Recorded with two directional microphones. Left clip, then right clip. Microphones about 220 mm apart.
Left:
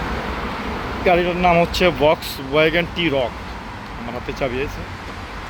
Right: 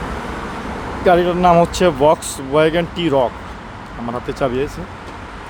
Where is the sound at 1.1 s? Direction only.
25° right (ahead or behind).